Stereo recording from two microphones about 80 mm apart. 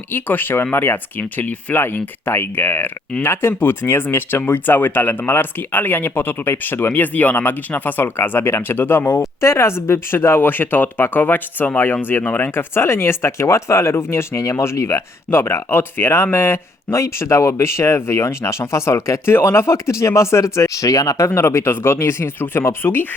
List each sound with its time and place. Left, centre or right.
0.1 s speech: left